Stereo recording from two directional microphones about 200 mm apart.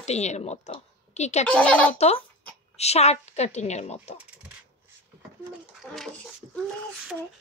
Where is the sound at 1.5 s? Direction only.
5° left (ahead or behind).